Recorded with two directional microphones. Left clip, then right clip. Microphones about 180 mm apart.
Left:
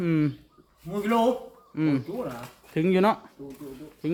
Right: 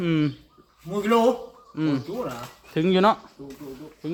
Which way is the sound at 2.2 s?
5° right (ahead or behind).